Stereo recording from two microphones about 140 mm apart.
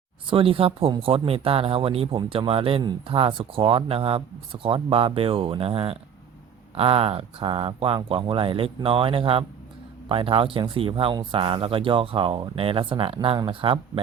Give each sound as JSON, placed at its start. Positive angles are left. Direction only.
{"t": 0.3, "sound": "speech", "side_deg": -40}